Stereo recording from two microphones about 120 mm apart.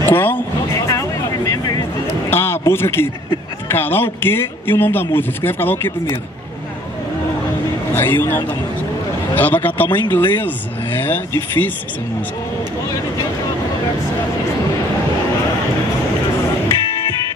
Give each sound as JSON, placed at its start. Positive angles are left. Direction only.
{"t": 0.0, "sound": "vehicle", "side_deg": 20}
{"t": 2.2, "sound": "a man's voice", "side_deg": 20}
{"t": 7.9, "sound": "a man's voice", "side_deg": 15}